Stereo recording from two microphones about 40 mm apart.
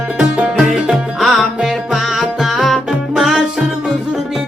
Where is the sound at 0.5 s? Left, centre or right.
Centre.